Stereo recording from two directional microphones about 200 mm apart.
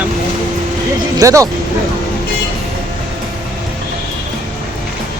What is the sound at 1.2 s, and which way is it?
Speech, 15° right (ahead or behind).